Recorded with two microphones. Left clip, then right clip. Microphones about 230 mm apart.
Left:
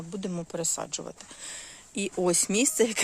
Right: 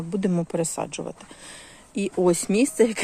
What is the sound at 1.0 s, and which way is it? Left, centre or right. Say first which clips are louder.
Speech: right 4 dB; centre.